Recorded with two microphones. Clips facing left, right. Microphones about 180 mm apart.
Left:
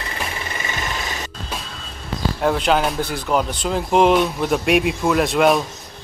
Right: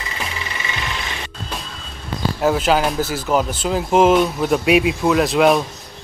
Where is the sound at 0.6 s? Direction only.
45° left (ahead or behind).